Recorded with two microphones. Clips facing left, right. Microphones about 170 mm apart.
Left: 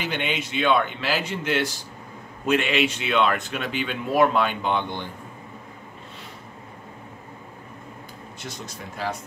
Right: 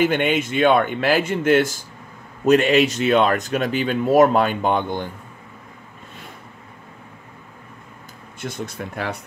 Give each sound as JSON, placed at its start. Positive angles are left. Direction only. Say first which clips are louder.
{"t": 0.0, "sound": "speech", "louder": "right 9 dB", "side_deg": -50}
{"t": 8.4, "sound": "speech", "louder": "right 9 dB", "side_deg": -55}